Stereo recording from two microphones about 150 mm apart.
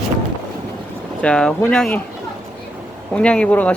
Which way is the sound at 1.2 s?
5° left (ahead or behind).